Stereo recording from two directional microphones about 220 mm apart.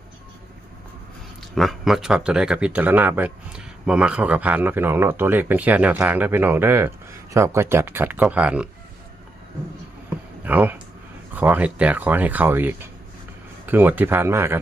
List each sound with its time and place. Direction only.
1.4 s speech: centre (ahead or behind)
10.4 s speech: 5° right (ahead or behind)